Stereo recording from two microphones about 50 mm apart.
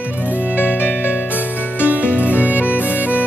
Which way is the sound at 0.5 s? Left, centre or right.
Left.